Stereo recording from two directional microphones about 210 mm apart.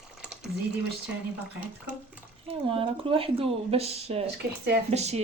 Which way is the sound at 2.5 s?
25° right (ahead or behind).